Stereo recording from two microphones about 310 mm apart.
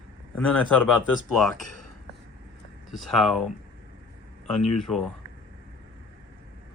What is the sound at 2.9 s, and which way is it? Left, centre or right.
Speech, centre.